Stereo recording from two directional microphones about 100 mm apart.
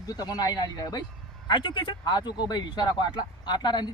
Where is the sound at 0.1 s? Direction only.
40° left (ahead or behind).